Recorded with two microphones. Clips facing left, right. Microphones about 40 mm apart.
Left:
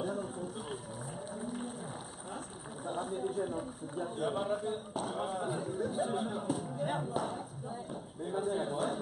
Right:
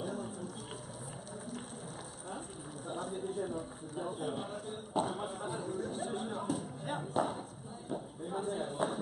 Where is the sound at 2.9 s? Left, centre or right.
Centre.